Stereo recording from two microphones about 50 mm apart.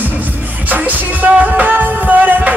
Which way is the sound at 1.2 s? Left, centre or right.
Right.